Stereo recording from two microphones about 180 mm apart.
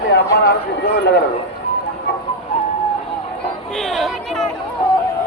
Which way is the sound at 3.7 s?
Centre (ahead or behind).